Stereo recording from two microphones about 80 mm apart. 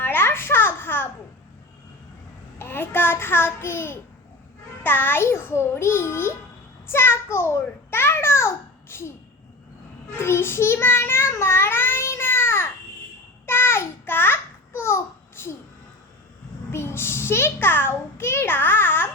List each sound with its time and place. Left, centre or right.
0.0 s a sound: left
2.6 s a child's voice: left
10.2 s a child's voice: left
11.3 s babbling: left
16.7 s a child's voice: left